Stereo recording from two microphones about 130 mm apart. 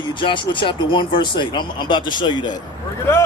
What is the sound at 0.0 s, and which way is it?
A man's voice, 40° left (ahead or behind).